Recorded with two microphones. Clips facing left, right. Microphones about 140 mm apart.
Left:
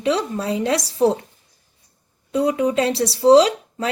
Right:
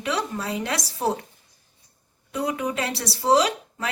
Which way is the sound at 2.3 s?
25° left (ahead or behind).